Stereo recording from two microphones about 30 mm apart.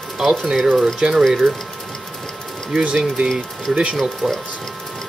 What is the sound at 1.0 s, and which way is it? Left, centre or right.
Speech, right.